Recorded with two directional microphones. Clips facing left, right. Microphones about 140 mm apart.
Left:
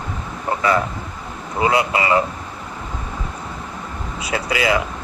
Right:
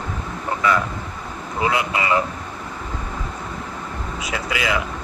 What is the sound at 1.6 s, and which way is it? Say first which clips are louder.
Speech: left 3 dB; 30° left (ahead or behind).